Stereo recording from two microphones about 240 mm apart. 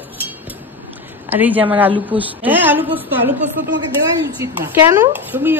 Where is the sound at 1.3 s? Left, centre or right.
Centre.